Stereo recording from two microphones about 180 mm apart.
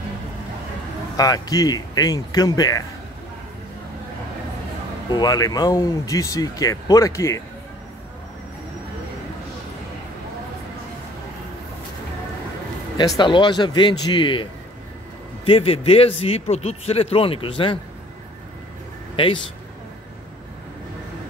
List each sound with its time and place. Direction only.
1.1 s speech: 20° left (ahead or behind)
5.1 s speech: 20° left (ahead or behind)
13.2 s a man's voice: 25° left (ahead or behind)
19.1 s a man's voice: 30° left (ahead or behind)